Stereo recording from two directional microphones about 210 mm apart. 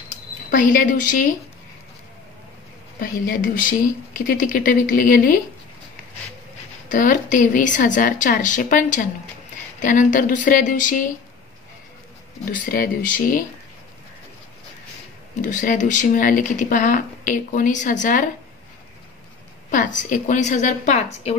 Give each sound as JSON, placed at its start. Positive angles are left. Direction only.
{"t": 0.5, "sound": "speech", "side_deg": 40}
{"t": 3.0, "sound": "speech", "side_deg": 40}
{"t": 6.9, "sound": "speech", "side_deg": 40}
{"t": 12.4, "sound": "speech", "side_deg": 45}
{"t": 15.4, "sound": "speech", "side_deg": 40}
{"t": 19.7, "sound": "speech", "side_deg": 40}